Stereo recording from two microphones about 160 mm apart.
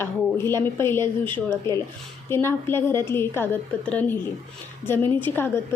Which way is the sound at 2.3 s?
15° left (ahead or behind).